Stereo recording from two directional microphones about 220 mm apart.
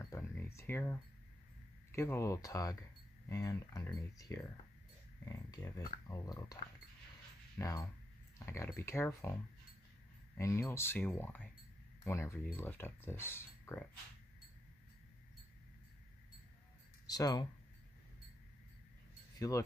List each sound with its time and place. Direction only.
0.0 s a sound: 15° left (ahead or behind)
1.9 s speech: 10° left (ahead or behind)
17.1 s speech: 15° left (ahead or behind)
19.3 s wind chime: 15° left (ahead or behind)